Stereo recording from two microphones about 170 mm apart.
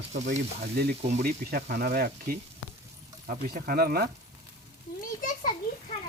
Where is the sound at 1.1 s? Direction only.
55° right (ahead or behind).